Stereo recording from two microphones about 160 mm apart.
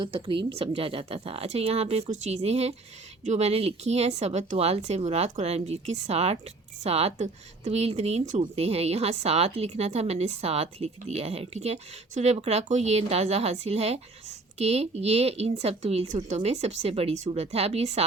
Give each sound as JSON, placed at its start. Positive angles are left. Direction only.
{"t": 0.0, "sound": "speech", "side_deg": -30}